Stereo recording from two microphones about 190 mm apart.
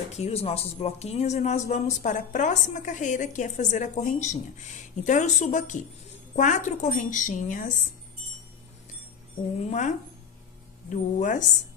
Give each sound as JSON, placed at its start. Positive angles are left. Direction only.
{"t": 0.1, "sound": "a woman's voice", "side_deg": 35}
{"t": 9.7, "sound": "speech", "side_deg": 40}